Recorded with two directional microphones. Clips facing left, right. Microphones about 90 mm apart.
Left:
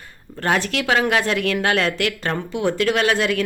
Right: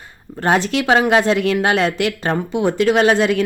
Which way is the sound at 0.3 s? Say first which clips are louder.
Right 4 dB; 20° right (ahead or behind).